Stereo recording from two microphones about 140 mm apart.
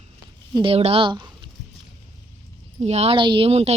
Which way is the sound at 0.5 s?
40° right (ahead or behind).